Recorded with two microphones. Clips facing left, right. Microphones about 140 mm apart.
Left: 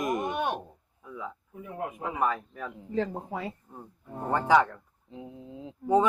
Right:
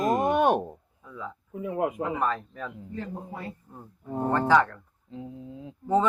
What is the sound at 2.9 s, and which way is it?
Speech, 90° left.